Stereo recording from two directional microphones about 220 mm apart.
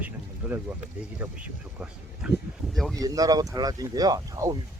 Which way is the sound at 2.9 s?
15° right (ahead or behind).